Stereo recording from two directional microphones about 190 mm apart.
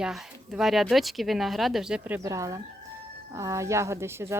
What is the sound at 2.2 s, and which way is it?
A woman's voice, 15° right (ahead or behind).